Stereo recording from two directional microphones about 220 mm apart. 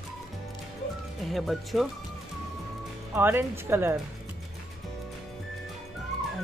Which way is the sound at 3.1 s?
10° right (ahead or behind).